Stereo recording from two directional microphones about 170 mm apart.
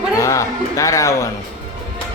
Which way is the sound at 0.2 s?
20° left (ahead or behind).